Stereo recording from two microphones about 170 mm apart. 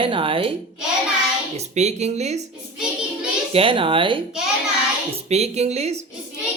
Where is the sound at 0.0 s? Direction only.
30° right (ahead or behind).